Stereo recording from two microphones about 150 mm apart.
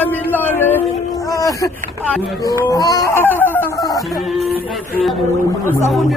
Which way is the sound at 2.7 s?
25° left (ahead or behind).